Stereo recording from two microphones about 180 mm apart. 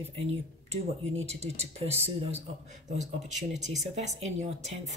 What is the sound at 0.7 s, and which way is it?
Speech, 35° right (ahead or behind).